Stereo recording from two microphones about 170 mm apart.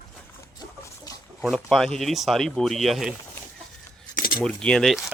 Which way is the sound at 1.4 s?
Centre (ahead or behind).